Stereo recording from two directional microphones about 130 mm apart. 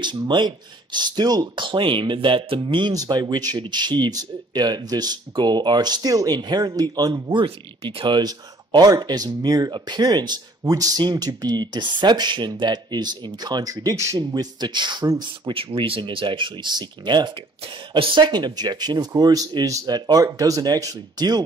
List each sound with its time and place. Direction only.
0.0 s speech: 35° right (ahead or behind)
7.4 s speech: 45° right (ahead or behind)
15.5 s speech: 45° right (ahead or behind)